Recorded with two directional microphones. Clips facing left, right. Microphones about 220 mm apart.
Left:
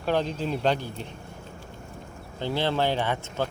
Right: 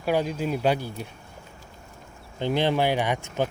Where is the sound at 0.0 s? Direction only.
10° right (ahead or behind).